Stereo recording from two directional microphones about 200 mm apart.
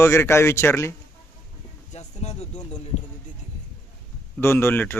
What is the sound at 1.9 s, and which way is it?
Speech, 35° left (ahead or behind).